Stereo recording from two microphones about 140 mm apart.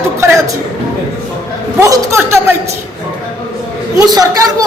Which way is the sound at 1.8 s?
20° right (ahead or behind).